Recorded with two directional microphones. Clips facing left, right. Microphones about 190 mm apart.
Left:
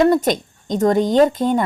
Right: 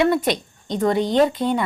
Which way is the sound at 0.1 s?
45° left (ahead or behind).